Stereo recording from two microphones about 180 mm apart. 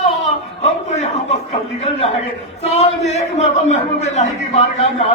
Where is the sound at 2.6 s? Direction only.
40° left (ahead or behind).